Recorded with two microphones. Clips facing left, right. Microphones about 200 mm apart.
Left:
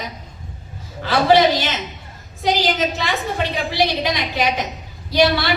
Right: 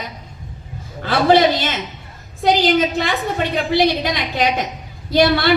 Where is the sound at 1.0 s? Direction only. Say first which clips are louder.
Right 1 dB; 50° right (ahead or behind).